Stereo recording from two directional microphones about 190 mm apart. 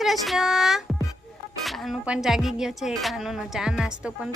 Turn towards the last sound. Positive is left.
turn(degrees=-5)  # may be behind; listen again after turning